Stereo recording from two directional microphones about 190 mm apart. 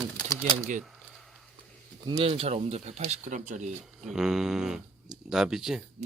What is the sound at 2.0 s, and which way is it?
Speech, 30° right (ahead or behind).